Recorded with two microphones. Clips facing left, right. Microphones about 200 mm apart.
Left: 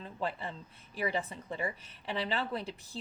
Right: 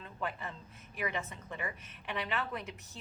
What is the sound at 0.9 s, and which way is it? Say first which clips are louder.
A woman's voice: left 4 dB; 30° left (ahead or behind).